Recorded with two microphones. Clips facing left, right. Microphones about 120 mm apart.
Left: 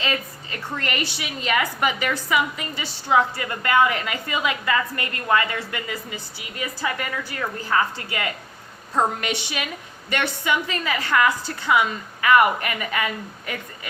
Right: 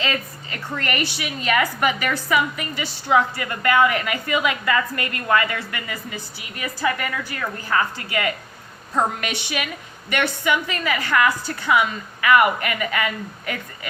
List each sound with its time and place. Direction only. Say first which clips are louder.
0.0 s a woman's voice: right 1 dB; 20° left (ahead or behind)